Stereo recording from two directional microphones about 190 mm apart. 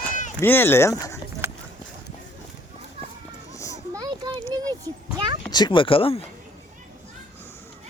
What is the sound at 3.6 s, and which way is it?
Children playing, 15° left (ahead or behind).